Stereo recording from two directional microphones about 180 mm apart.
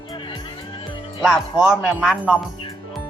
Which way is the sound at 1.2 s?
Centre (ahead or behind).